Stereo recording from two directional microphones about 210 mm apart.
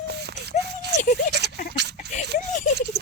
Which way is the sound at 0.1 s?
50° right (ahead or behind).